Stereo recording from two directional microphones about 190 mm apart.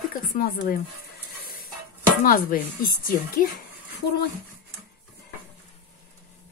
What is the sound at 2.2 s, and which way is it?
Speech, 50° left (ahead or behind).